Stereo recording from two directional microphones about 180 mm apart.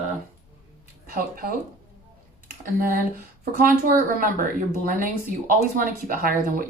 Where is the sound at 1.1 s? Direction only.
50° right (ahead or behind).